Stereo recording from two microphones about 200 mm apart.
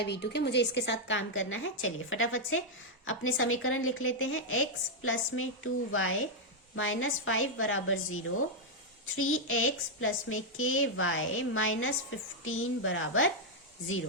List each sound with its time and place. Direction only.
0.0 s a woman's voice: 55° left (ahead or behind); by 4.6 s 85° left
5.3 s a woman's voice: 65° left (ahead or behind)
5.9 s speech: 80° left